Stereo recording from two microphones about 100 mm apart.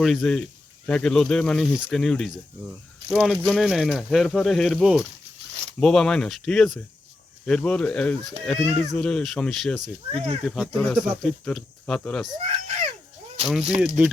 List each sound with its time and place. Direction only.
0.0 s speech: 5° left (ahead or behind)
5.8 s speech: 5° left (ahead or behind)
10.1 s speech: 90° right
10.4 s speech: 5° left (ahead or behind)
12.4 s speech: 90° right
13.5 s speech: 5° right (ahead or behind)